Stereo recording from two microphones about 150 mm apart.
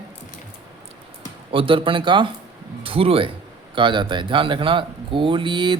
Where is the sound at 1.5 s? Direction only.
35° right (ahead or behind).